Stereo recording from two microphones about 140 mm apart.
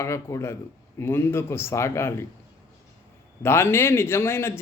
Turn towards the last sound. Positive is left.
turn(degrees=20)  # may be behind; listen again after turning